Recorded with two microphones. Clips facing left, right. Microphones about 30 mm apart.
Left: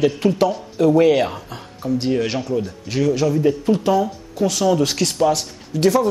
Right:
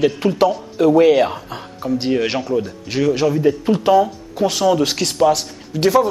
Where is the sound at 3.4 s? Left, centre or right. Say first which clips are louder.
Right 1 dB; centre.